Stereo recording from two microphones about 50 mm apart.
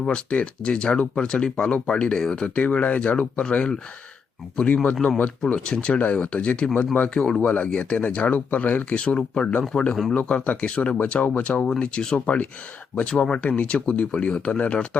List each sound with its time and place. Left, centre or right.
0.0 s speech: left
2.6 s speech: left
5.9 s speech: left